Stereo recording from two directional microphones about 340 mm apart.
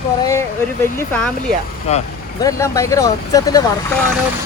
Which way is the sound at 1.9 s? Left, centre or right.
Centre.